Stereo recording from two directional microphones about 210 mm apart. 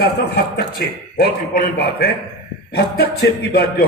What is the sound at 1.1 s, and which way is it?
Speech, 50° left (ahead or behind).